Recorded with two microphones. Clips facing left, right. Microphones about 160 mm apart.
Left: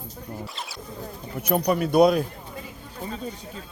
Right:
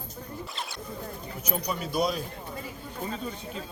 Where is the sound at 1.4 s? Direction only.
60° left (ahead or behind).